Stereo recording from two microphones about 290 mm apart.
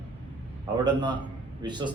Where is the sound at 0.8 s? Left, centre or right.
Centre.